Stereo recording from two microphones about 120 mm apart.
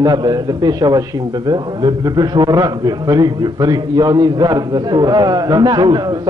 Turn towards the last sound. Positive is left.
turn(degrees=-35)  # may be behind; listen again after turning